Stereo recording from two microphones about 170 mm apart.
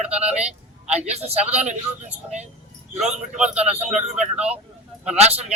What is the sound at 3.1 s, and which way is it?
Speech, 5° right (ahead or behind).